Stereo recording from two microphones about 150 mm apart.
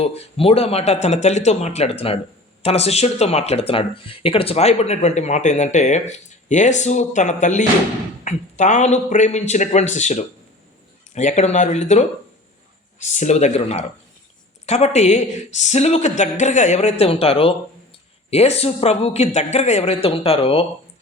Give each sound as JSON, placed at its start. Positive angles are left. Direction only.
{"t": 0.0, "sound": "speech", "side_deg": 40}
{"t": 13.1, "sound": "speech", "side_deg": 50}